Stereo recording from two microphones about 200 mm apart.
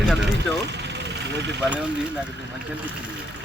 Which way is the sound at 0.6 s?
60° right (ahead or behind).